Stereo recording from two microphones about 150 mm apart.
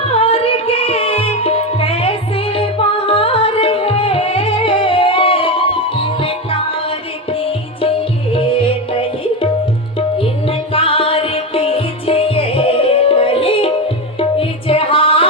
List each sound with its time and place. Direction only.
0.2 s music: 40° left (ahead or behind)